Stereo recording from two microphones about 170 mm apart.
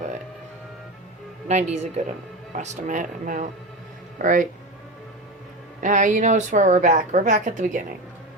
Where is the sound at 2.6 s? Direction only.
45° right (ahead or behind).